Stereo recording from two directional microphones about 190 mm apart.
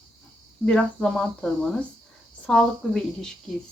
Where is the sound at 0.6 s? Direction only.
5° left (ahead or behind).